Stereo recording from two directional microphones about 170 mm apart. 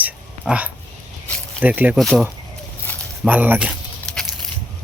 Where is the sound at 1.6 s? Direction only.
10° right (ahead or behind).